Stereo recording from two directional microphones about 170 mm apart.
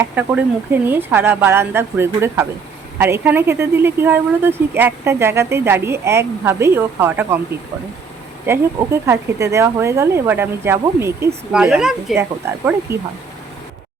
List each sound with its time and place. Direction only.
0.0 s speech: 10° right (ahead or behind)
8.4 s speech: 15° right (ahead or behind)
11.5 s speech: 5° right (ahead or behind)
12.1 s speech: 15° right (ahead or behind)